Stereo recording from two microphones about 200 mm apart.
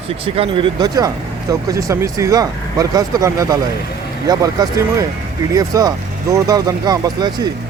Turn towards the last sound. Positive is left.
turn(degrees=-20)  # may be behind; listen again after turning